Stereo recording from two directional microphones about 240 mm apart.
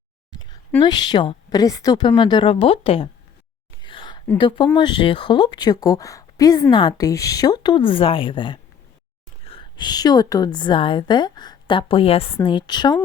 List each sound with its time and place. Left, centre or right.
0.3 s speech: centre
3.8 s whispering: centre
4.4 s a woman's voice: centre